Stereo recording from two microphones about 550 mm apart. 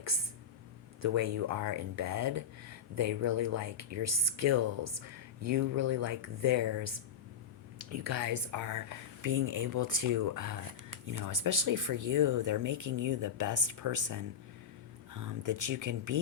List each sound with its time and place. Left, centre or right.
1.0 s speech: right